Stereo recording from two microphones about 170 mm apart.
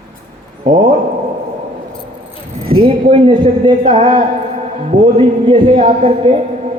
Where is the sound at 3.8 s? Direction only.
30° right (ahead or behind).